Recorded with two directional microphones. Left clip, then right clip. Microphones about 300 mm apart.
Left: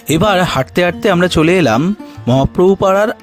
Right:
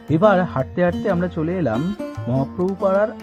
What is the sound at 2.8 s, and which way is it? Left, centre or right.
Speech, left.